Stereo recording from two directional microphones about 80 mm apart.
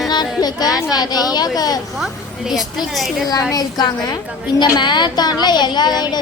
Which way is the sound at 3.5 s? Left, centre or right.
Left.